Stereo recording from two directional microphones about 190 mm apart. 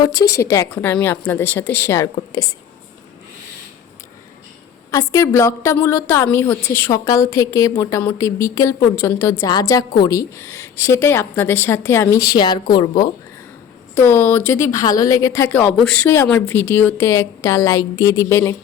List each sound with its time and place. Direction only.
0.0 s a woman's voice: 20° left (ahead or behind)
4.9 s a woman's voice: 15° left (ahead or behind)
13.9 s a woman's voice: 10° left (ahead or behind)